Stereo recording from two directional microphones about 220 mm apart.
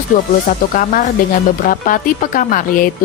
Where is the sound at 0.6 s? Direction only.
40° left (ahead or behind).